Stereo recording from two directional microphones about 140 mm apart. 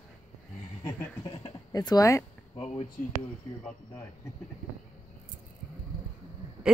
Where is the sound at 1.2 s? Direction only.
40° left (ahead or behind).